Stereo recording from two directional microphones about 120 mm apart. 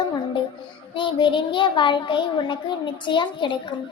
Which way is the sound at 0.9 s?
45° left (ahead or behind).